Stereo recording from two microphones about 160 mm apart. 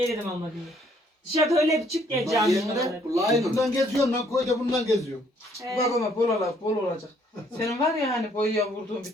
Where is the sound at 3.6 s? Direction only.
Centre (ahead or behind).